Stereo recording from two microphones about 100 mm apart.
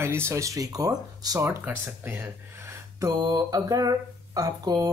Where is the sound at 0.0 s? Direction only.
25° right (ahead or behind).